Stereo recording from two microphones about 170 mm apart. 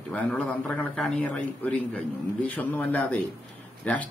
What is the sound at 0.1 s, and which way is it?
A man's voice, 10° left (ahead or behind).